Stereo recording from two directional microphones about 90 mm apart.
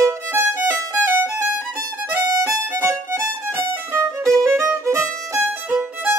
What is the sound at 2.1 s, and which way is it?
Violin, 35° right (ahead or behind).